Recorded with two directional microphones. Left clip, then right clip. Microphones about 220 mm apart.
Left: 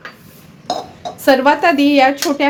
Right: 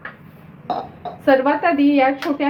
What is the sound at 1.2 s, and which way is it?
Speech, 55° left (ahead or behind).